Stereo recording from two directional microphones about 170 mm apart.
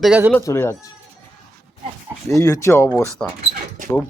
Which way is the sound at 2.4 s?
20° left (ahead or behind).